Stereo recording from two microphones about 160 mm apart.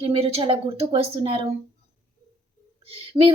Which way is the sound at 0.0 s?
35° right (ahead or behind).